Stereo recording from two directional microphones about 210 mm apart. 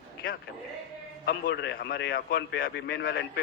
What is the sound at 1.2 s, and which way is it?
A man's voice, 50° left (ahead or behind).